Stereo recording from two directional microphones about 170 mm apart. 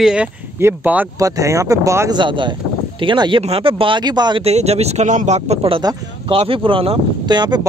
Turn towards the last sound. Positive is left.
turn(degrees=-25)  # may be behind; listen again after turning